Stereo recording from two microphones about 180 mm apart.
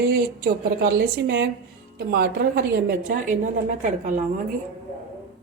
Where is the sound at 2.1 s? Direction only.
55° right (ahead or behind).